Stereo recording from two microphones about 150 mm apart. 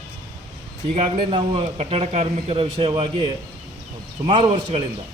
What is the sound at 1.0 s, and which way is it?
A man's voice, 40° right (ahead or behind).